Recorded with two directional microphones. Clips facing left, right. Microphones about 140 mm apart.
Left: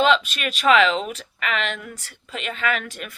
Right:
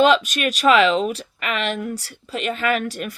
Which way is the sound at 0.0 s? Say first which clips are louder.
Right 3 dB; 45° right (ahead or behind).